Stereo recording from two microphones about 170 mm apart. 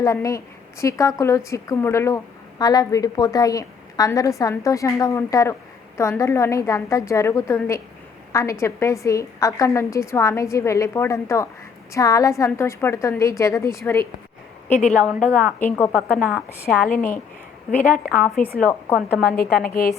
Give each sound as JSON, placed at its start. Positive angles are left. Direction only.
{"t": 0.0, "sound": "a woman's voice", "side_deg": 20}
{"t": 14.9, "sound": "a woman's voice", "side_deg": 5}
{"t": 17.8, "sound": "a woman's voice", "side_deg": 55}
{"t": 18.6, "sound": "a woman's voice", "side_deg": 10}
{"t": 19.2, "sound": "a woman's voice", "side_deg": 60}